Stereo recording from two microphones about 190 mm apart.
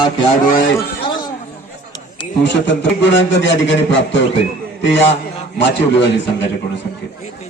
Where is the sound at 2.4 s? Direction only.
70° left (ahead or behind).